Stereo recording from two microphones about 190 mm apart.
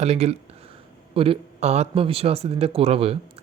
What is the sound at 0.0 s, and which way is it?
Speech, 35° right (ahead or behind).